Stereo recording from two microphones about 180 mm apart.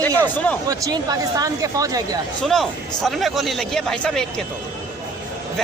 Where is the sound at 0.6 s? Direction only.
20° right (ahead or behind).